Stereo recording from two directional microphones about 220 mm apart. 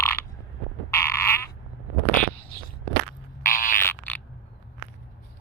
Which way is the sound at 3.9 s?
10° left (ahead or behind).